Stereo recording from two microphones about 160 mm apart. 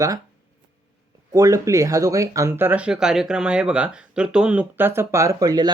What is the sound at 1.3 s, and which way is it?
Speech, 20° right (ahead or behind).